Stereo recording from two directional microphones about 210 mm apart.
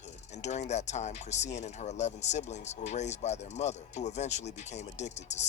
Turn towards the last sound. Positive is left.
turn(degrees=35)  # may be behind; listen again after turning